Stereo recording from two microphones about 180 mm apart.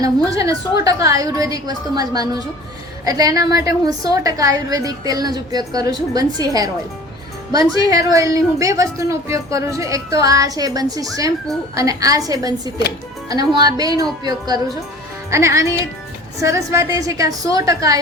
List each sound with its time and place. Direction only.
0.0 s a woman's voice: 20° right (ahead or behind)
7.9 s a woman's voice: 20° right (ahead or behind)